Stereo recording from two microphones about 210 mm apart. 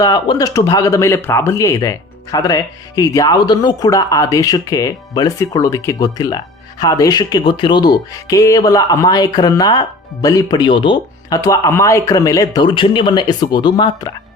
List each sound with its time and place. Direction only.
0.0 s speech: 20° left (ahead or behind)